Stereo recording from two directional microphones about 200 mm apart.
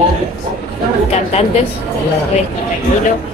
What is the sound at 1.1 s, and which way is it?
Speech, 35° left (ahead or behind).